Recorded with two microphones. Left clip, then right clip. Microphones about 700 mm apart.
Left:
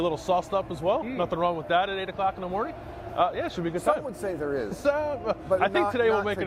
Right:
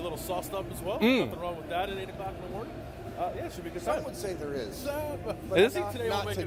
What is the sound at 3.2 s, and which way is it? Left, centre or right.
Speech, left.